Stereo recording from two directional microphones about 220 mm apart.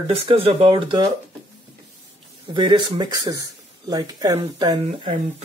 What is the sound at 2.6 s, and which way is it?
Speech, 20° right (ahead or behind).